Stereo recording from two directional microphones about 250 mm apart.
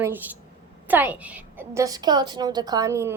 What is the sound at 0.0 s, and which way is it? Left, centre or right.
A woman's voice, centre.